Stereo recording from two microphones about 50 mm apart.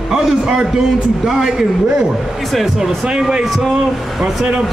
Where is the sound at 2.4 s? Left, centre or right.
Centre.